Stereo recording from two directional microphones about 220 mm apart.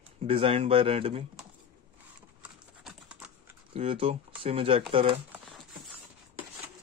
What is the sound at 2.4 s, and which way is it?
Typing, centre (ahead or behind).